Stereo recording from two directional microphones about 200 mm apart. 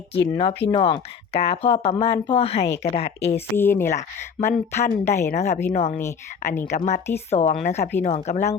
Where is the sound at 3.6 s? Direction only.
10° left (ahead or behind).